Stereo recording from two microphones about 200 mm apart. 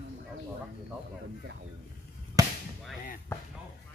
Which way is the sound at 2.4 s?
15° right (ahead or behind).